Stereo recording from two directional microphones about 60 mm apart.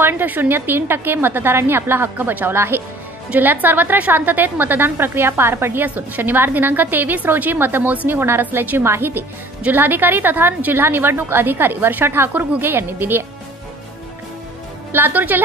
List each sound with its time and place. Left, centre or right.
0.0 s a woman's voice: right
3.3 s a woman's voice: right
5.9 s a woman's voice: right
9.6 s a woman's voice: right
14.9 s a woman's voice: right